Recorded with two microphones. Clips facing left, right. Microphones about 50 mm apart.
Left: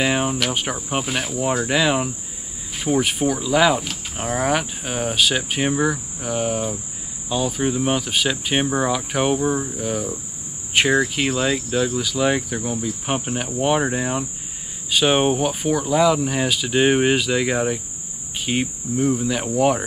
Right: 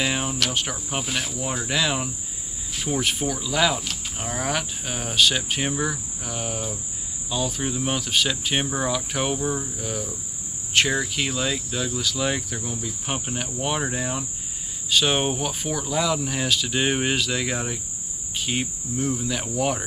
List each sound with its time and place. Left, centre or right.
0.0 s cricket: centre